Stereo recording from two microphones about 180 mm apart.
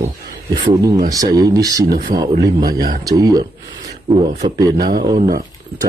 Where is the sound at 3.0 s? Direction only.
20° right (ahead or behind).